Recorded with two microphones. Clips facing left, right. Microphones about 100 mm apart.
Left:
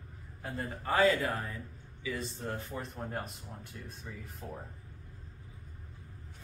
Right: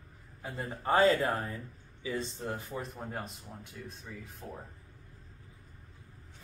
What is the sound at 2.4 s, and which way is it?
Speech, 10° right (ahead or behind).